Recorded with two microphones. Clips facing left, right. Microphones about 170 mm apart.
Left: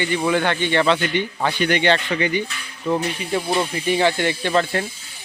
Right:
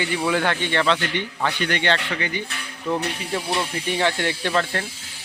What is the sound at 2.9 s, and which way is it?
Speech, 5° left (ahead or behind).